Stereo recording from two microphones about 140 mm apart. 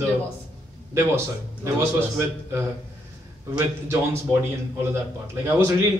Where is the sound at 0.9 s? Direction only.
20° right (ahead or behind).